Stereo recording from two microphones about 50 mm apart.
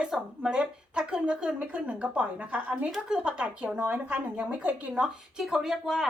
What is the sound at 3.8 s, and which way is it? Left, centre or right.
Speech, right.